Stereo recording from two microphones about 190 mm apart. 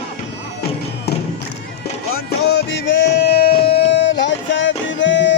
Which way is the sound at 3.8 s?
65° left (ahead or behind).